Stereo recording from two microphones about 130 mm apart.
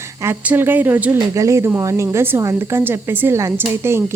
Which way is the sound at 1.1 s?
25° right (ahead or behind).